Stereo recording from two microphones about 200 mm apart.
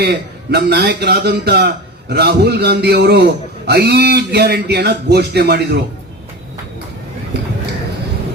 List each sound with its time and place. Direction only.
0.0 s a man's voice: 50° right (ahead or behind)